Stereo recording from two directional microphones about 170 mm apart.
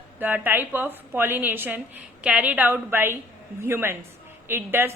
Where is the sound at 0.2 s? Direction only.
10° right (ahead or behind).